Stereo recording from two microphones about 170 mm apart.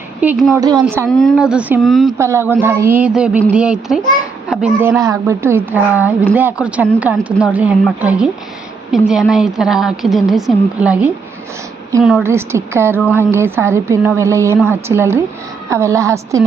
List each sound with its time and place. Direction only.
0.5 s speech: 20° right (ahead or behind)
1.1 s a woman's voice: centre (ahead or behind)
2.1 s a woman's voice: 15° right (ahead or behind)
4.8 s a woman's voice: 15° right (ahead or behind)
12.2 s speech: 15° right (ahead or behind)